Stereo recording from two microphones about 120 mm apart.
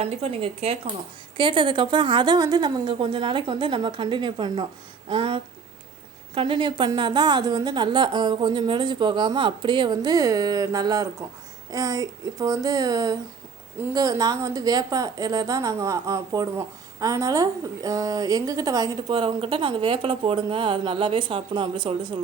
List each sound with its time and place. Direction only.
0.0 s speech: 55° right (ahead or behind)
1.4 s a woman's voice: 45° right (ahead or behind)
19.1 s speech: 45° right (ahead or behind)